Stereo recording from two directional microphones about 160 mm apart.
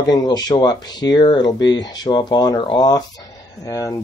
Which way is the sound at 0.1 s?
25° left (ahead or behind).